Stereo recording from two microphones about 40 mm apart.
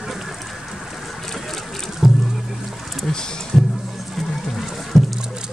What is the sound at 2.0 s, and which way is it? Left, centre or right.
Music, centre.